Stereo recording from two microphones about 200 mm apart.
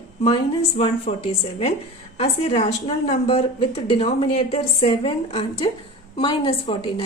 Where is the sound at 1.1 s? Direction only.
30° left (ahead or behind).